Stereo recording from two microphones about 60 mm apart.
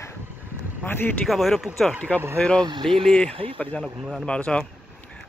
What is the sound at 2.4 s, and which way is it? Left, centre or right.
Speech, centre.